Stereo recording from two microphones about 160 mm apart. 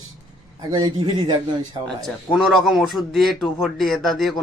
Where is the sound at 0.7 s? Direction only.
30° right (ahead or behind).